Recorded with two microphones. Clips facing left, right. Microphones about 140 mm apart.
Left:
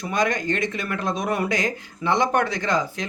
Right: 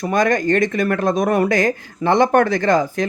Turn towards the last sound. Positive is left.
turn(degrees=-50)  # may be behind; listen again after turning